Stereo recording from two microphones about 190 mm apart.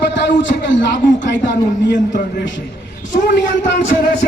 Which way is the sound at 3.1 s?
70° left (ahead or behind).